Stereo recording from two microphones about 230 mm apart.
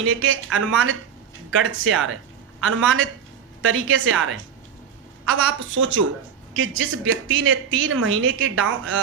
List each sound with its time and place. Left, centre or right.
0.0 s a woman's voice: right